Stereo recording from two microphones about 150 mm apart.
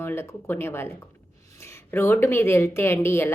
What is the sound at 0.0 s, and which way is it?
A woman's voice, 15° left (ahead or behind).